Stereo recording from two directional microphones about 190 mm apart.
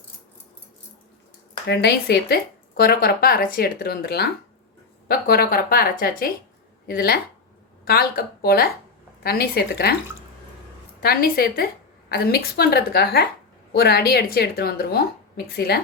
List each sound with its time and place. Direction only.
1.6 s speech: 60° left (ahead or behind)
11.0 s speech: 55° left (ahead or behind)